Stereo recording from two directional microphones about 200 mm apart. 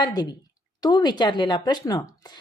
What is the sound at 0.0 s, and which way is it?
A woman's voice, 20° left (ahead or behind).